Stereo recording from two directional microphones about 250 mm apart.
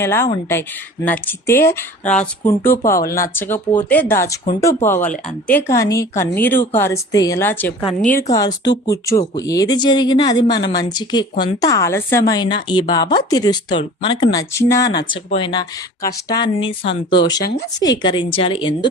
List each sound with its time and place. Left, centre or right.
0.0 s speech: centre
7.9 s a woman's voice: left
8.3 s a woman's voice: centre